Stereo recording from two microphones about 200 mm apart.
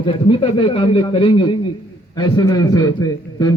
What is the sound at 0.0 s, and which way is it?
A man's voice, 25° left (ahead or behind).